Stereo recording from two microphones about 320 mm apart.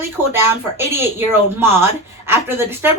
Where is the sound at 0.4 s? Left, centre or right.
Centre.